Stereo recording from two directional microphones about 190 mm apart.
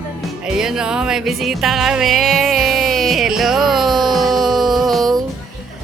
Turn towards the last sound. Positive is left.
turn(degrees=0)  # may be behind; listen again after turning